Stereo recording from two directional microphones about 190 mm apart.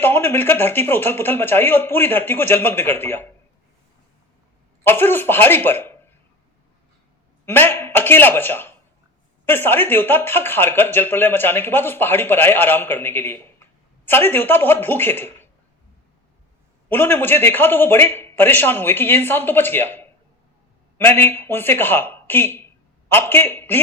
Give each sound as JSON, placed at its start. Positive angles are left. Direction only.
{"t": 0.0, "sound": "speech", "side_deg": 10}
{"t": 4.8, "sound": "speech", "side_deg": 10}
{"t": 7.4, "sound": "a man's voice", "side_deg": 10}
{"t": 16.9, "sound": "speech", "side_deg": 10}